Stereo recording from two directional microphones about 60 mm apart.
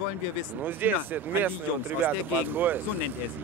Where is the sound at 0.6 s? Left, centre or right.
Right.